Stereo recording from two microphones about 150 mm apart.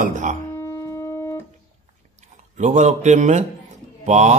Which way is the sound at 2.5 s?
50° right (ahead or behind).